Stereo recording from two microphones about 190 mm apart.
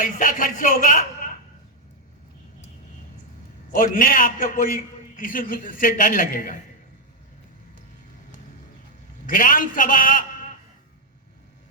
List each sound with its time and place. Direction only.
0.0 s a man's voice: 45° left (ahead or behind)
3.8 s a man's voice: 45° left (ahead or behind)
9.2 s a man's voice: 45° left (ahead or behind)